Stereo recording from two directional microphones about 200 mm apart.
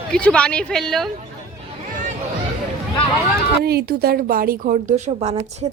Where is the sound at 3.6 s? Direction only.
50° right (ahead or behind).